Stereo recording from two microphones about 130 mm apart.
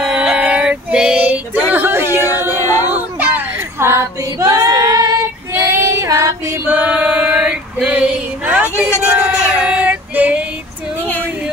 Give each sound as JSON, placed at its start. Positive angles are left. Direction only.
{"t": 0.0, "sound": "female singing", "side_deg": -5}
{"t": 2.2, "sound": "a sound", "side_deg": 25}
{"t": 2.9, "sound": "music", "side_deg": -10}
{"t": 3.8, "sound": "female singing", "side_deg": -20}
{"t": 6.7, "sound": "female singing", "side_deg": -10}
{"t": 9.0, "sound": "a sound", "side_deg": -10}
{"t": 9.6, "sound": "female singing", "side_deg": -10}